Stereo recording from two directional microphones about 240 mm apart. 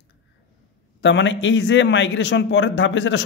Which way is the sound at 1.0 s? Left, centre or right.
Left.